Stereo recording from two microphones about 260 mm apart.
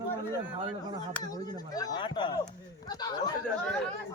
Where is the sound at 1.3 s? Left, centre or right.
Centre.